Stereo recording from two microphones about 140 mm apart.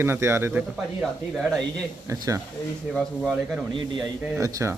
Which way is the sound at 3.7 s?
35° right (ahead or behind).